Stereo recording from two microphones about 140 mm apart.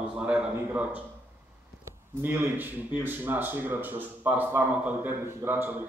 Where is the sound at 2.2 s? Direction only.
15° right (ahead or behind).